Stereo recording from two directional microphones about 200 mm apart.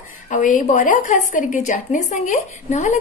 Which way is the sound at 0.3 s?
40° left (ahead or behind).